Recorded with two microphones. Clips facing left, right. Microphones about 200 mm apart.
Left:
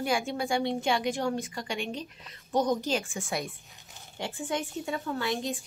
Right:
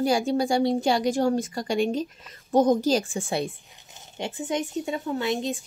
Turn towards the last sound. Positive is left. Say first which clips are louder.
# right 5 dB
turn(degrees=-20)  # may be behind; listen again after turning